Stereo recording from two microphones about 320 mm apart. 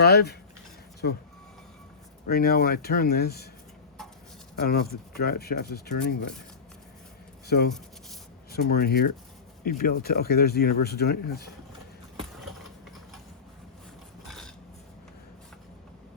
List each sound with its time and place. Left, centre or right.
0.0 s speech: left
2.3 s speech: left
4.5 s speech: left
7.4 s speech: left
14.3 s a sound: centre